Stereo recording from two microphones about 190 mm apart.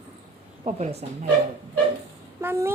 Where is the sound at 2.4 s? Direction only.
10° right (ahead or behind).